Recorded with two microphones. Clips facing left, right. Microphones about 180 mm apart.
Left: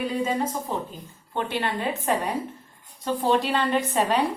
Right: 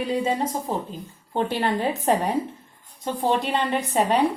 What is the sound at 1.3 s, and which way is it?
Speech, 40° right (ahead or behind).